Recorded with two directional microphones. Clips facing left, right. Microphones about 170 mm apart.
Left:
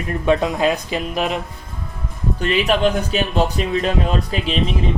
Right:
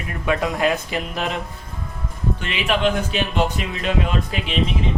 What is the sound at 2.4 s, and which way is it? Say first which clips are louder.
Speech: left 5 dB; 40° left (ahead or behind).